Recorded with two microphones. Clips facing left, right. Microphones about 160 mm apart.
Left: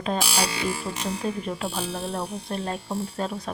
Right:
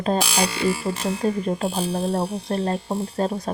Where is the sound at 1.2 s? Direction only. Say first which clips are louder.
Right 8 dB; 40° right (ahead or behind).